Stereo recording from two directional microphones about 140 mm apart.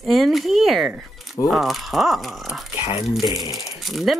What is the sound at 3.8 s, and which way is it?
Speech, centre (ahead or behind).